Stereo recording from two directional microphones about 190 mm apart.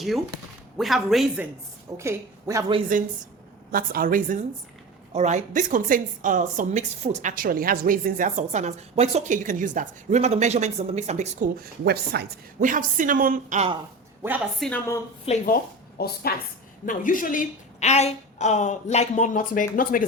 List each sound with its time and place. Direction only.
0.8 s speech: centre (ahead or behind)
2.0 s a woman's voice: 15° right (ahead or behind)
3.7 s a woman's voice: 50° right (ahead or behind)
14.2 s speech: 10° right (ahead or behind)
14.6 s speech: 10° left (ahead or behind)
15.3 s speech: 30° left (ahead or behind)
16.0 s a woman's voice: 55° left (ahead or behind)
16.8 s a woman's voice: 45° left (ahead or behind)